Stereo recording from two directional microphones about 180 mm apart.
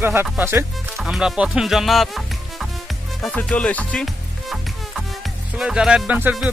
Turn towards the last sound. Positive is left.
turn(degrees=-10)  # may be behind; listen again after turning